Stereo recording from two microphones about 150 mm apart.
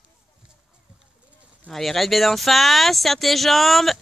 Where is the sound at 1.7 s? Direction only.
Centre (ahead or behind).